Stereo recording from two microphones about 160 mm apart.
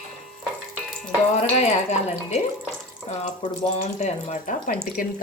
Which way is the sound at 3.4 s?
40° left (ahead or behind).